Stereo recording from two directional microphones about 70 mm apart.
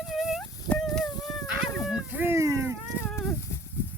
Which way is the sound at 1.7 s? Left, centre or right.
Centre.